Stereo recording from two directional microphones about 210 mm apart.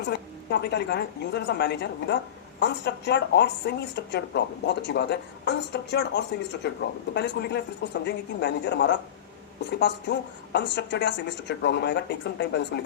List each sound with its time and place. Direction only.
0.0 s a woman's voice: 50° left (ahead or behind)